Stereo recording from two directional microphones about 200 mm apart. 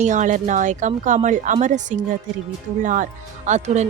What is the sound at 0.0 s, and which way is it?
Speech, 40° right (ahead or behind).